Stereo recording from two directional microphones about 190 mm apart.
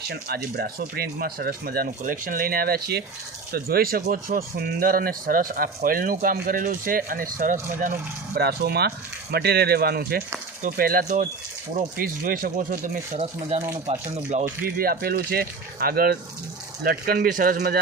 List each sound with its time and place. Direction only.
0.1 s speech: 55° right (ahead or behind)
8.4 s speech: 60° right (ahead or behind); by 14.5 s 35° right (ahead or behind)
14.8 s speech: 50° right (ahead or behind)